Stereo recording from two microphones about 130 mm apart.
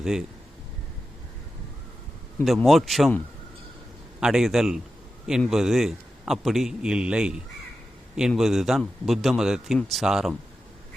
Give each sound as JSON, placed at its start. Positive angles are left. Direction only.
{"t": 0.0, "sound": "speech", "side_deg": -5}
{"t": 2.4, "sound": "a man's voice", "side_deg": 0}
{"t": 4.2, "sound": "a man's voice", "side_deg": -5}